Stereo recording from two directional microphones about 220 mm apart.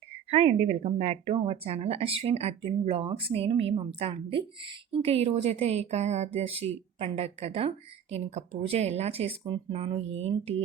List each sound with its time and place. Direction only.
0.3 s speech: 25° right (ahead or behind)